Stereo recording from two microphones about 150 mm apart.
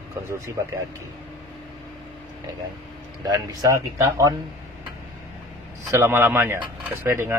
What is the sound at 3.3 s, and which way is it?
Speech, 20° right (ahead or behind).